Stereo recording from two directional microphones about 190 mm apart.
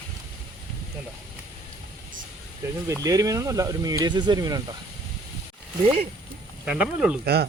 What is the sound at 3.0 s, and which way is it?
Speech, 20° right (ahead or behind).